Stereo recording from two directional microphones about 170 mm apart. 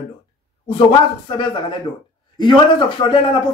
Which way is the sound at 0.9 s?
30° left (ahead or behind).